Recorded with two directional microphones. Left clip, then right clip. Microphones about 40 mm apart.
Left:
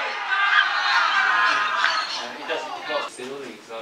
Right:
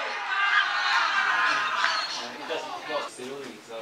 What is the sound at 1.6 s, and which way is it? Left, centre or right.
Music, centre.